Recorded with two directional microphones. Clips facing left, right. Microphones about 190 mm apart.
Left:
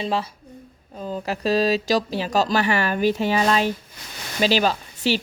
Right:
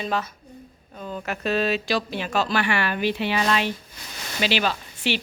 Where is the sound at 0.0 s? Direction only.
30° left (ahead or behind).